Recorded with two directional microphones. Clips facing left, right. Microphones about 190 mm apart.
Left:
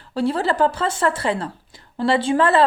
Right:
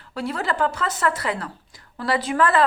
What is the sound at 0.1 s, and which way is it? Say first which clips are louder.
A woman's voice: left 6 dB; 30° left (ahead or behind).